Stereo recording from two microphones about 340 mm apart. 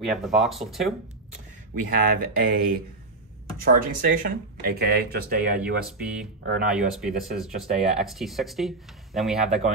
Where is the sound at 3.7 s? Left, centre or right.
Right.